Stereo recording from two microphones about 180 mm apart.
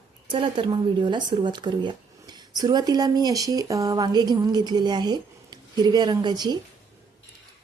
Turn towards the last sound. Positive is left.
turn(degrees=-25)  # may be behind; listen again after turning